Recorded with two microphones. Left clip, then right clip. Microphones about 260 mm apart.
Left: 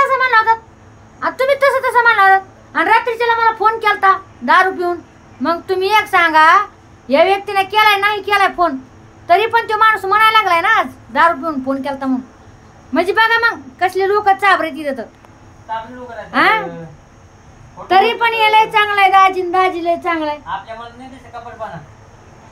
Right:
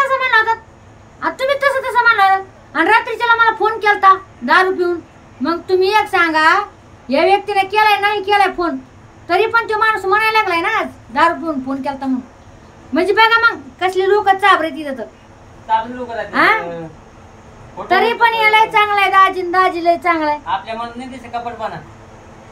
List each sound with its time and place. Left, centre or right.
0.0 s a sound: centre
5.4 s speech: centre
16.3 s speech: centre
17.8 s a woman's voice: centre